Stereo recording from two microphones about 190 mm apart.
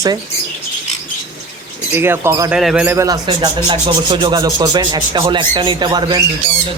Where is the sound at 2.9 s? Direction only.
20° right (ahead or behind).